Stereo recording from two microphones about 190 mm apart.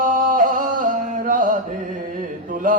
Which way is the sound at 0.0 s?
45° right (ahead or behind).